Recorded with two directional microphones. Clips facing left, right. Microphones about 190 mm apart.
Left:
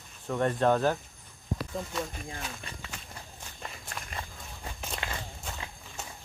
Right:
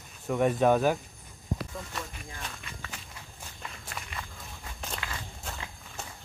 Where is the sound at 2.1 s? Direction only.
40° left (ahead or behind).